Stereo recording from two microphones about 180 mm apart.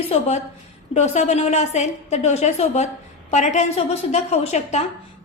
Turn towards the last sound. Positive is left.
turn(degrees=35)  # may be behind; listen again after turning